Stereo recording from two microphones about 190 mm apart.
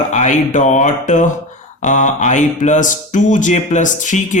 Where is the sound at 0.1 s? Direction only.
40° left (ahead or behind).